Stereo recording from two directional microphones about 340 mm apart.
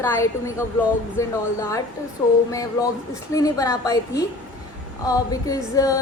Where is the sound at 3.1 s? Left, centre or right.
Centre.